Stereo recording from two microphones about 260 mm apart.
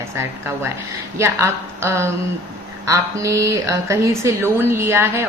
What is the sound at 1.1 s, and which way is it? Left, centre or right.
A woman's voice, centre.